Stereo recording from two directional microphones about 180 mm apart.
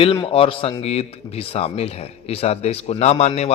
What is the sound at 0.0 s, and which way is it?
Speech, 30° left (ahead or behind).